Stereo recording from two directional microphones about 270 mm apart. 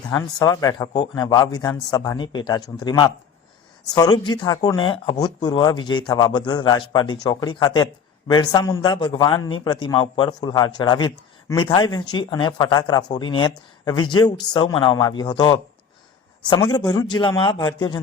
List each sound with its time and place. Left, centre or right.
0.1 s a man's voice: centre